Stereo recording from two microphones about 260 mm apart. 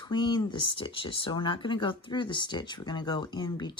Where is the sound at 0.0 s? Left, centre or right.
Centre.